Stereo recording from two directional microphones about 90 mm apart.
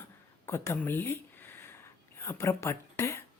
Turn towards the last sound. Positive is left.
turn(degrees=30)  # may be behind; listen again after turning